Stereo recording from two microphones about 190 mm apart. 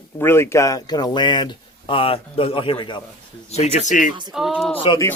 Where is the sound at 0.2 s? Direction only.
15° left (ahead or behind); by 4.1 s 40° left (ahead or behind).